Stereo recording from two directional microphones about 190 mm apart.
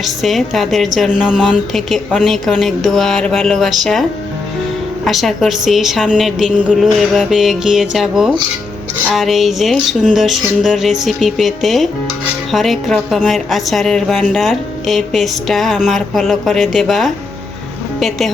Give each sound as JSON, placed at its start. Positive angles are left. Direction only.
{"t": 0.0, "sound": "speech", "side_deg": 0}
{"t": 5.0, "sound": "speech", "side_deg": 0}